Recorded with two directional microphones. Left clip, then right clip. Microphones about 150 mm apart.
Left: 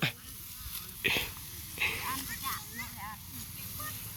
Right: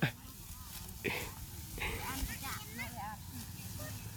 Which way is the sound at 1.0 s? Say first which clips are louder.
Left 8 dB; 5° right (ahead or behind).